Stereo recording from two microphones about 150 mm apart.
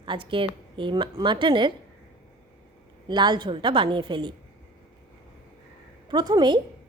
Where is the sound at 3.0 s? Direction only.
30° right (ahead or behind).